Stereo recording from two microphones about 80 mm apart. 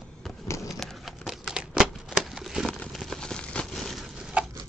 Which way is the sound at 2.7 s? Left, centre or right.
Centre.